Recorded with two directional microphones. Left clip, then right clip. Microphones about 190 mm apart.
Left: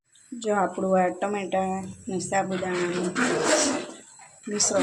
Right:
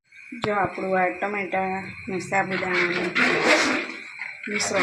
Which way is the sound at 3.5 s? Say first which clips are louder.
Right 3 dB; 15° left (ahead or behind).